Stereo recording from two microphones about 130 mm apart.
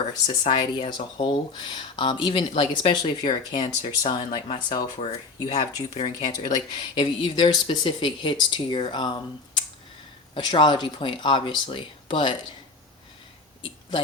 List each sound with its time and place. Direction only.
0.1 s speech: 35° left (ahead or behind)
10.3 s speech: 40° left (ahead or behind)